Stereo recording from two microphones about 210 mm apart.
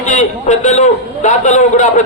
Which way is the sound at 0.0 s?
35° left (ahead or behind).